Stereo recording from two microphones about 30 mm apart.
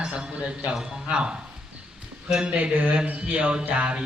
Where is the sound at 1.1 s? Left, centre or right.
Right.